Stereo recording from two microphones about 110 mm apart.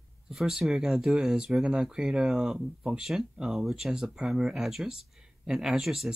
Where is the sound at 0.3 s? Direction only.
Centre (ahead or behind).